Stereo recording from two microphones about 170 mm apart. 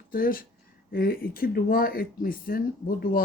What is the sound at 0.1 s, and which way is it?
Speech, 55° left (ahead or behind).